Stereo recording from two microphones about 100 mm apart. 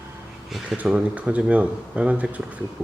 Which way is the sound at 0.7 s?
15° right (ahead or behind).